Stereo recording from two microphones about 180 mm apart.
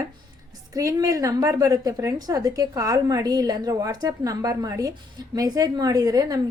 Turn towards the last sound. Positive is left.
turn(degrees=-20)  # may be behind; listen again after turning